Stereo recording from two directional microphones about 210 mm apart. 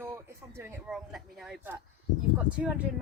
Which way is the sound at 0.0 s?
10° right (ahead or behind).